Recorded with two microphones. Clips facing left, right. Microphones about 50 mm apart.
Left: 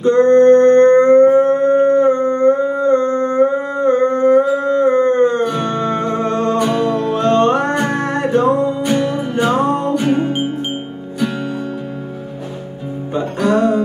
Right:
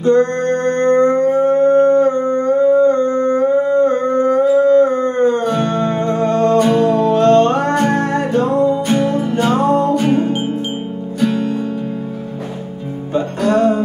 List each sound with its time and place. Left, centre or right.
0.0 s a sound: centre
5.6 s music: centre
11.1 s music: centre
13.5 s music: right